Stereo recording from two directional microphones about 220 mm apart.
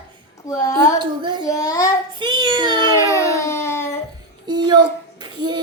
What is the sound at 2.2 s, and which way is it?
Speech, 20° right (ahead or behind).